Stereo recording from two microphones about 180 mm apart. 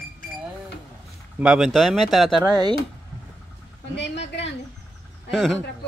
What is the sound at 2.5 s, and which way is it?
Speech, 25° right (ahead or behind).